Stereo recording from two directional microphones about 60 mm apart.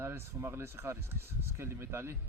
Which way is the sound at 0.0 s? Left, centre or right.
Right.